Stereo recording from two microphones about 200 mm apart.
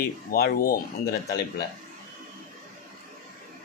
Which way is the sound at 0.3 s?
45° left (ahead or behind).